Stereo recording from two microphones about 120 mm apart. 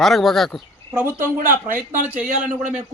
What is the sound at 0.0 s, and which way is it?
Speech, centre (ahead or behind).